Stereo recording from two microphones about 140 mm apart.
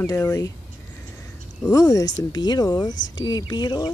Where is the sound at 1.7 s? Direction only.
25° left (ahead or behind).